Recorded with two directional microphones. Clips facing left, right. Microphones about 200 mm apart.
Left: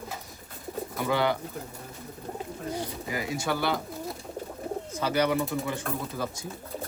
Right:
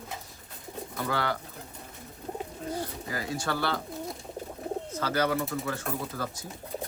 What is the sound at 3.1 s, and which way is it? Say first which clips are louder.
Speech: left 3 dB; 15° left (ahead or behind).